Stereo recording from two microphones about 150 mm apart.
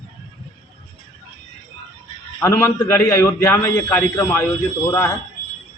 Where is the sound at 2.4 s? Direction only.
15° left (ahead or behind).